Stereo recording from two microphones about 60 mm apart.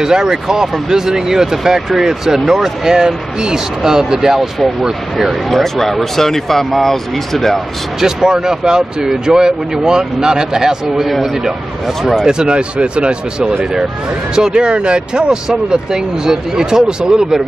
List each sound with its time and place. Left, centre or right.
0.0 s speech: centre
8.0 s speech: centre
12.0 s speech: centre
12.3 s speech: centre
14.3 s speech: centre